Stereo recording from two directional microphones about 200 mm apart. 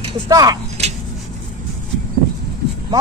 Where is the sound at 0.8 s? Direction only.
30° right (ahead or behind).